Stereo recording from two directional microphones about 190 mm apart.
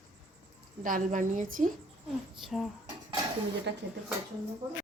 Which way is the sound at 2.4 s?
Centre (ahead or behind).